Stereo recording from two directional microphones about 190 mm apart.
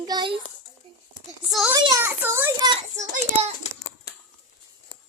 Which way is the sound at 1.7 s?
20° right (ahead or behind).